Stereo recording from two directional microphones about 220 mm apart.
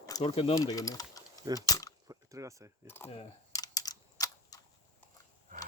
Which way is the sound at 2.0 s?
15° right (ahead or behind).